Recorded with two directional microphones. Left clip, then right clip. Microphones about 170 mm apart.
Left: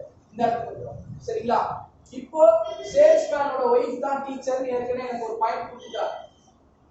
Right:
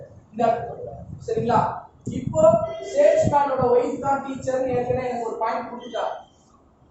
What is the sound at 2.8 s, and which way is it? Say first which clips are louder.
A woman's voice: left 2 dB; centre (ahead or behind).